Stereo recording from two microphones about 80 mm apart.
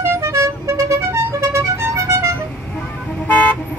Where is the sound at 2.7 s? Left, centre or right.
Centre.